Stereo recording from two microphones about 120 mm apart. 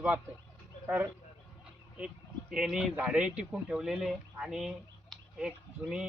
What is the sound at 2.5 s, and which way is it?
Speech, 5° right (ahead or behind).